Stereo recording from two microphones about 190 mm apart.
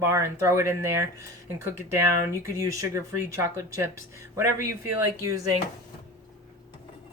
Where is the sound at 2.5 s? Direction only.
15° right (ahead or behind).